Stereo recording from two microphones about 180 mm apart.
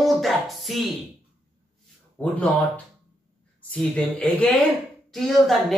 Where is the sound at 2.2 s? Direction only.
10° left (ahead or behind).